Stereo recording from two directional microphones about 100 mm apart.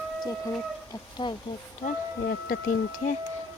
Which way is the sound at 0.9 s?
45° left (ahead or behind).